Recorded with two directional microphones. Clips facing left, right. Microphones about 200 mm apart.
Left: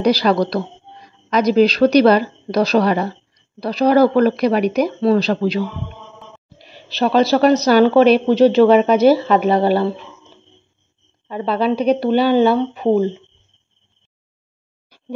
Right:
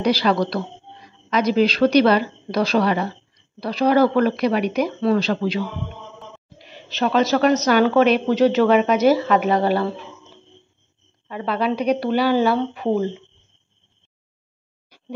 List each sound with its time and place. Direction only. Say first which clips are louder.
0.0 s a woman's voice: left 4 dB; 40° left (ahead or behind)
6.6 s a woman's voice: left 3 dB; 35° left (ahead or behind)
11.2 s speech: left 4 dB; 30° left (ahead or behind)